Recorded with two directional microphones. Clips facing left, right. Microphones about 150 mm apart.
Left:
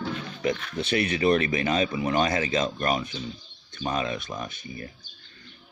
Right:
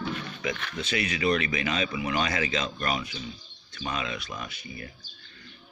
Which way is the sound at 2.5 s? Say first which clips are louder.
Left 4 dB; 45° left (ahead or behind).